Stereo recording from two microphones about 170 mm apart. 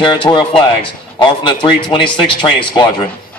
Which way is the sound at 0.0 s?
30° left (ahead or behind).